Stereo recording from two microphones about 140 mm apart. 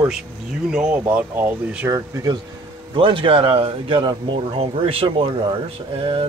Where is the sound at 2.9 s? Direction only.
40° right (ahead or behind).